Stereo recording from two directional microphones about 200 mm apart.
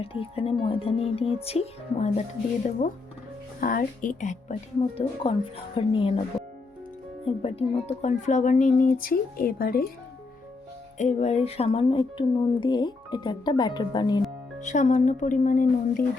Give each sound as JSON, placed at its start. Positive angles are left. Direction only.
{"t": 0.0, "sound": "speech", "side_deg": 30}
{"t": 4.9, "sound": "speech", "side_deg": 30}
{"t": 7.3, "sound": "speech", "side_deg": 30}
{"t": 10.9, "sound": "speech", "side_deg": 35}
{"t": 14.6, "sound": "speech", "side_deg": 35}